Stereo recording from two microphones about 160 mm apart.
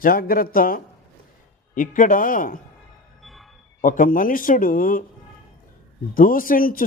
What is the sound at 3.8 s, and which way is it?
A man's voice, 55° left (ahead or behind).